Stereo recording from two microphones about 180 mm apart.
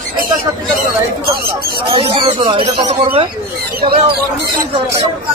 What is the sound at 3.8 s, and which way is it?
Speech, 60° right (ahead or behind).